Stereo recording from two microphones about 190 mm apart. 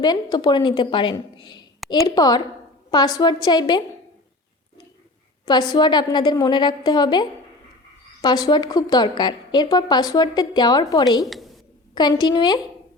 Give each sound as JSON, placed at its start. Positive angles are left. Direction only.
{"t": 0.0, "sound": "a woman's voice", "side_deg": 20}
{"t": 5.5, "sound": "a woman's voice", "side_deg": 25}